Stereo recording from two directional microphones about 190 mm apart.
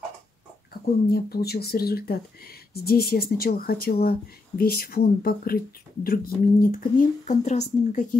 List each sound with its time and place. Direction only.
1.1 s speech: 55° left (ahead or behind); by 8.2 s 40° left (ahead or behind)